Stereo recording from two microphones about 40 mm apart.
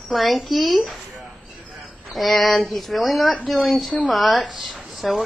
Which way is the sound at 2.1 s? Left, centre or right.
Centre.